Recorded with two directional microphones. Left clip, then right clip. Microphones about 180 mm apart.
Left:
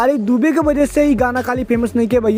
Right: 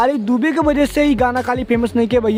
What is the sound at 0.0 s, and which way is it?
Speech, 15° left (ahead or behind).